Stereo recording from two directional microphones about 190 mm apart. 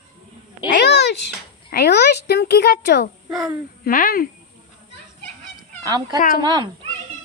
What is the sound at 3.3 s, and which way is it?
Speech, centre (ahead or behind).